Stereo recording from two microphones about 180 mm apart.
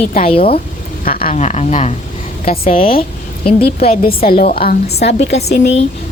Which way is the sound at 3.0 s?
30° left (ahead or behind).